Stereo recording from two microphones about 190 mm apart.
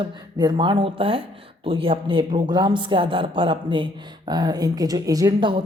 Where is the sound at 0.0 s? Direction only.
25° right (ahead or behind).